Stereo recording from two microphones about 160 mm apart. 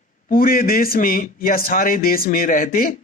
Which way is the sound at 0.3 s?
65° left (ahead or behind).